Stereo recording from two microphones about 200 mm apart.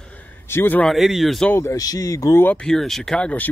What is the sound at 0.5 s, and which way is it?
Speech, 10° left (ahead or behind).